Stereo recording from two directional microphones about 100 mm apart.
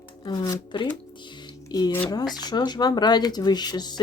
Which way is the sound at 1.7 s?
40° left (ahead or behind).